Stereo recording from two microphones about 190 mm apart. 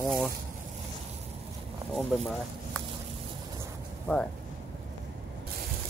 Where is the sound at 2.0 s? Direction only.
Centre (ahead or behind).